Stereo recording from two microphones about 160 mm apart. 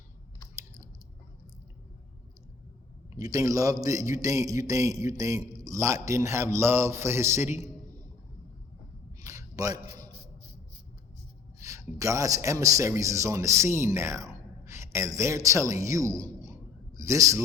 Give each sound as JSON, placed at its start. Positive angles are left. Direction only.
{"t": 3.2, "sound": "a man's voice", "side_deg": -20}
{"t": 9.2, "sound": "a sound", "side_deg": -20}
{"t": 11.6, "sound": "a man's voice", "side_deg": -20}